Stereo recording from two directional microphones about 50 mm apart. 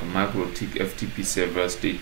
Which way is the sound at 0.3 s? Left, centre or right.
Centre.